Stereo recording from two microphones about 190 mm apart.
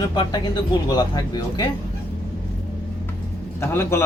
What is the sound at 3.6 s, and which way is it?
Speech, 15° left (ahead or behind).